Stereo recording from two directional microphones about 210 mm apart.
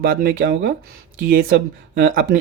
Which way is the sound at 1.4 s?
65° right (ahead or behind).